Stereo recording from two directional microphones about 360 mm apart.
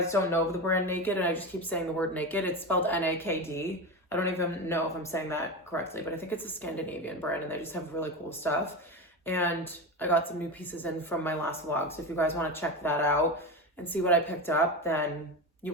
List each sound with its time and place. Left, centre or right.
0.1 s speech: centre